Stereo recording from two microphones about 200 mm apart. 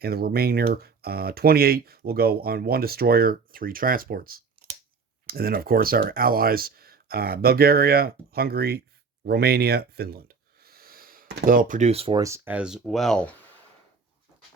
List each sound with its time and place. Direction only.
0.0 s speech: 50° right (ahead or behind); by 12.2 s 30° right (ahead or behind)
12.2 s speech: 10° right (ahead or behind)